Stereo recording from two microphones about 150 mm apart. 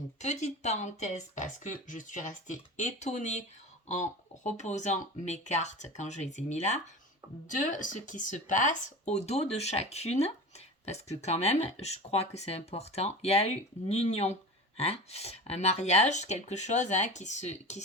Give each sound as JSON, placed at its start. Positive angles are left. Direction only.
{"t": 0.2, "sound": "speech", "side_deg": 50}